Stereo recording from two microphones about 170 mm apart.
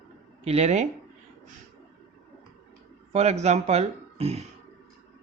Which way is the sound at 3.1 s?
40° right (ahead or behind).